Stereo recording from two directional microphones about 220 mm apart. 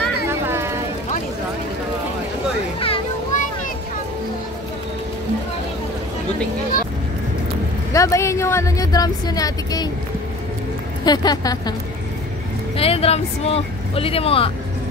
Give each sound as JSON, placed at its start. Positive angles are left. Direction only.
{"t": 0.3, "sound": "a sound", "side_deg": -10}
{"t": 2.8, "sound": "children playing", "side_deg": 25}
{"t": 7.9, "sound": "speech", "side_deg": 15}
{"t": 11.1, "sound": "speech", "side_deg": 20}
{"t": 12.7, "sound": "speech", "side_deg": 25}